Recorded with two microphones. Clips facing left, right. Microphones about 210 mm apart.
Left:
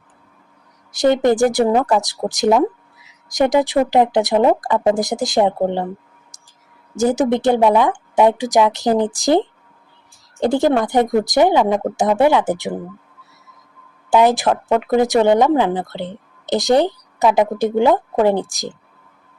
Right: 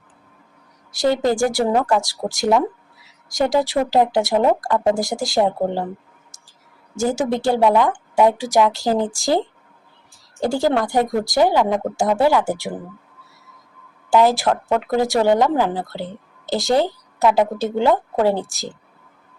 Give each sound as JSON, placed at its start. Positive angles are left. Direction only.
{"t": 0.9, "sound": "speech", "side_deg": 20}
{"t": 6.9, "sound": "speech", "side_deg": 20}
{"t": 10.4, "sound": "speech", "side_deg": 20}
{"t": 14.1, "sound": "a woman's voice", "side_deg": 20}